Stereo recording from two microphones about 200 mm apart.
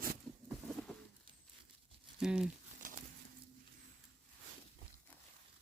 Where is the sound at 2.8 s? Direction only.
40° right (ahead or behind).